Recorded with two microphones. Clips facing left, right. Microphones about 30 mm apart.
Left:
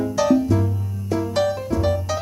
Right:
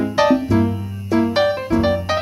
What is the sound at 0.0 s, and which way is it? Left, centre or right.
Music, right.